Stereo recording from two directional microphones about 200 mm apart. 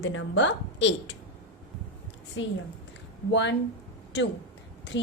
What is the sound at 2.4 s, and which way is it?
A woman's voice, 70° left (ahead or behind).